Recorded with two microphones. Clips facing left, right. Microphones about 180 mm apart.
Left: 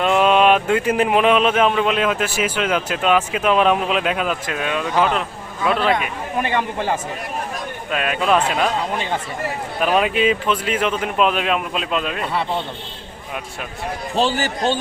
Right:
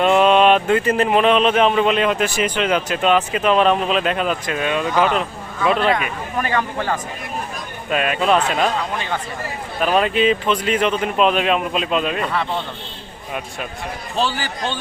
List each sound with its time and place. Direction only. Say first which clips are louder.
0.0 s speech: right 2 dB; 5° left (ahead or behind)
6.5 s a man's voice: right 1 dB; 25° left (ahead or behind)
7.9 s speech: right 2 dB; centre (ahead or behind)
9.8 s speech: right 1 dB; 10° left (ahead or behind)
14.3 s a man's voice: left 5 dB; 45° left (ahead or behind)